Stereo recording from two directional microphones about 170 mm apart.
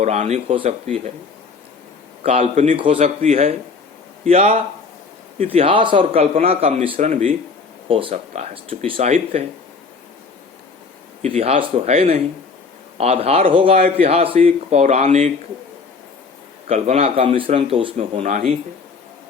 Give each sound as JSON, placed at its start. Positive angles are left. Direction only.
{"t": 0.0, "sound": "a man's voice", "side_deg": -40}
{"t": 2.2, "sound": "speech", "side_deg": -45}
{"t": 2.7, "sound": "a man's voice", "side_deg": -30}
{"t": 7.1, "sound": "speech", "side_deg": -45}
{"t": 7.9, "sound": "a man's voice", "side_deg": -30}
{"t": 11.3, "sound": "a man's voice", "side_deg": -35}
{"t": 16.6, "sound": "a man's voice", "side_deg": -40}
{"t": 17.9, "sound": "speech", "side_deg": -45}